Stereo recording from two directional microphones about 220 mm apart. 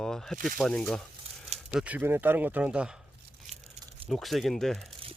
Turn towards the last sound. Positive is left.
turn(degrees=0)  # may be behind; listen again after turning